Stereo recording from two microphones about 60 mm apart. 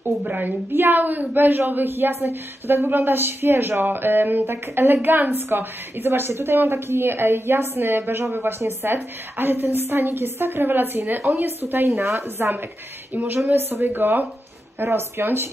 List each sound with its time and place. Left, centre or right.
0.0 s a woman's voice: right
11.6 s speech: right
12.0 s speech: right
13.1 s a woman's voice: right
14.8 s speech: right